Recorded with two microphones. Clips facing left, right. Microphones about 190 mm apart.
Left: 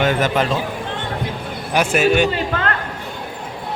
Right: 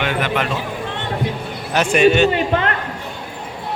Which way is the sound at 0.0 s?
40° left (ahead or behind).